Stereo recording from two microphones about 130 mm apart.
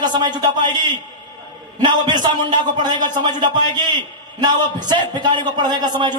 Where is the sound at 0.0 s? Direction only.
35° right (ahead or behind).